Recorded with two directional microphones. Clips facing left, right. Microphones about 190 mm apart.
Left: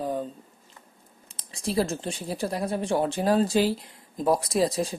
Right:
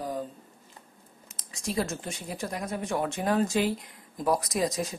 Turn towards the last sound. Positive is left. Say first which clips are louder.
# left 4 dB
turn(degrees=30)  # may be behind; listen again after turning